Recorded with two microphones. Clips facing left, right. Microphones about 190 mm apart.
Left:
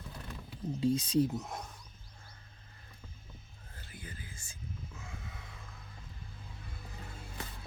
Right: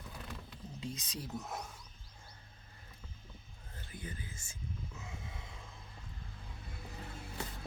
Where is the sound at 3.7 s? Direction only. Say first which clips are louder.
Right 3 dB; 20° right (ahead or behind).